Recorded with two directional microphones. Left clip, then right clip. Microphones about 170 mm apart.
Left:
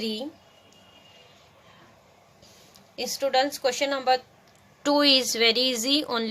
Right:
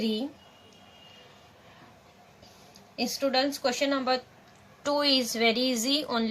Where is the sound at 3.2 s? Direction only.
60° left (ahead or behind).